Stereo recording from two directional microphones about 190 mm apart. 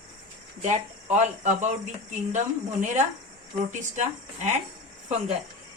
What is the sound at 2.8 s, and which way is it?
Speech, 40° right (ahead or behind).